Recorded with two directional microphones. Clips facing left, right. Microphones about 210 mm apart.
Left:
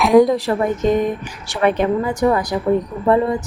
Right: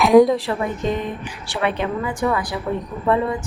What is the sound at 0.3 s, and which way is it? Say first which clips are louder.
A woman's voice: left 5 dB; 45° left (ahead or behind).